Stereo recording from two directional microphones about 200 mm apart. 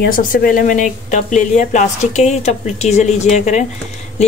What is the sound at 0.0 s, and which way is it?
Speech, 45° left (ahead or behind).